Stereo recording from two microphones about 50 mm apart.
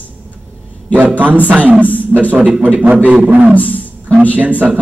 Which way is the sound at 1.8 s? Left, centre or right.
Left.